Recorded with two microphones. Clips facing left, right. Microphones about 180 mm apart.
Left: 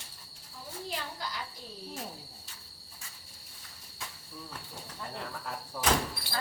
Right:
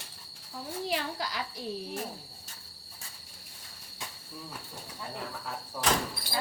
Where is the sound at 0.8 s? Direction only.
90° right.